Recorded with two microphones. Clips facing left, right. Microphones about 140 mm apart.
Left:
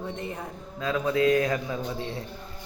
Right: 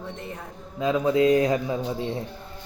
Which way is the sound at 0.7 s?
20° right (ahead or behind).